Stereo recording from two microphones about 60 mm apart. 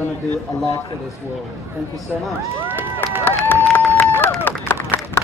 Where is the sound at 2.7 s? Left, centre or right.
Right.